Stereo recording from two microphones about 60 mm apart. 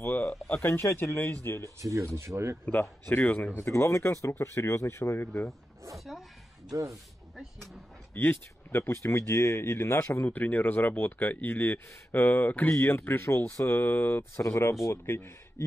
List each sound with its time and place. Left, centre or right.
0.0 s a sound: left
0.5 s speech: left
1.8 s speech: right
2.8 s speech: left
3.5 s speech: left
5.9 s a woman's voice: centre
8.1 s speech: left
12.7 s speech: left
14.4 s speech: left
15.0 s speech: left